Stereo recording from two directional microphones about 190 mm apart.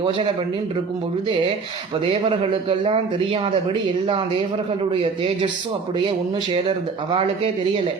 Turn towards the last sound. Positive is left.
turn(degrees=-25)  # may be behind; listen again after turning